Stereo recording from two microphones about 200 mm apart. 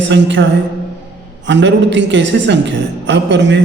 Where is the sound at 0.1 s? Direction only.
65° right (ahead or behind).